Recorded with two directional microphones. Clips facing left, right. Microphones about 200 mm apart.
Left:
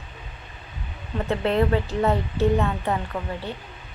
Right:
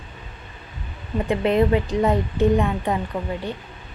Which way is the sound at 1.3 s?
15° right (ahead or behind).